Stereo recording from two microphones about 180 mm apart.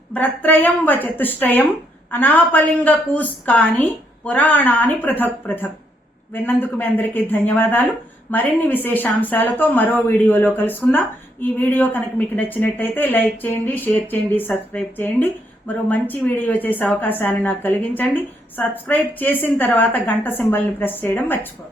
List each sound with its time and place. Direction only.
0.1 s a woman's voice: 10° left (ahead or behind)